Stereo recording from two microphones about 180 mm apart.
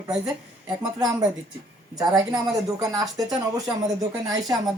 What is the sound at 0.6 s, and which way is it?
Speech, 20° right (ahead or behind).